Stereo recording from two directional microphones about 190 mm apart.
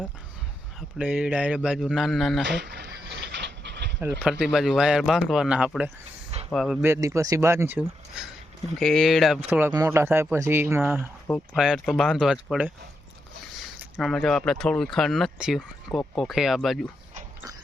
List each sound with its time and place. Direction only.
0.8 s speech: 5° right (ahead or behind)
2.4 s dog: 65° right (ahead or behind)
4.2 s speech: centre (ahead or behind)
6.8 s speech: 15° right (ahead or behind)
9.5 s speech: 10° right (ahead or behind)
11.3 s speech: centre (ahead or behind)
13.9 s speech: centre (ahead or behind)